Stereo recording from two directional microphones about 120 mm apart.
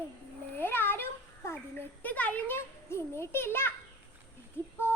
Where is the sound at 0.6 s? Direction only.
15° left (ahead or behind).